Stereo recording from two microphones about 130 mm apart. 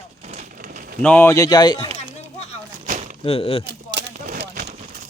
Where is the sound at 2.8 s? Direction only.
80° right.